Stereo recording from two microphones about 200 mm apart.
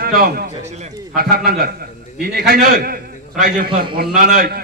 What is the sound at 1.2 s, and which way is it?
A man's voice, 50° right (ahead or behind).